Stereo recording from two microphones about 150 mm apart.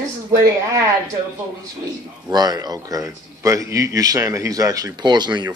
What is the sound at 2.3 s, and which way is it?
Speech, 25° right (ahead or behind).